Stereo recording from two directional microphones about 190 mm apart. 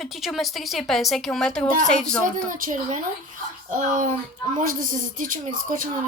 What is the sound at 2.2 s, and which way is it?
Speech, 45° right (ahead or behind).